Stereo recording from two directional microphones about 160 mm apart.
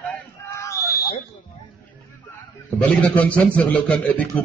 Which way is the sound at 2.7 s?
10° left (ahead or behind).